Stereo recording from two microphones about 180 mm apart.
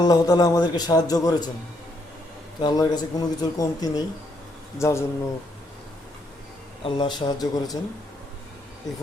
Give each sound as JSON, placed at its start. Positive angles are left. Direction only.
{"t": 0.0, "sound": "a man's voice", "side_deg": 20}
{"t": 2.6, "sound": "a man's voice", "side_deg": 20}
{"t": 6.8, "sound": "a man's voice", "side_deg": 25}